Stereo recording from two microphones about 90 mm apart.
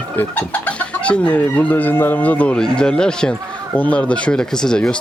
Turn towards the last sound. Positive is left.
turn(degrees=10)  # may be behind; listen again after turning